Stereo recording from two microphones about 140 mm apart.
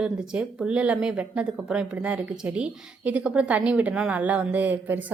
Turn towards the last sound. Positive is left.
turn(degrees=-10)  # may be behind; listen again after turning